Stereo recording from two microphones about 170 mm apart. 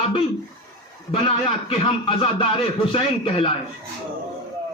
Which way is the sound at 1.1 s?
35° left (ahead or behind).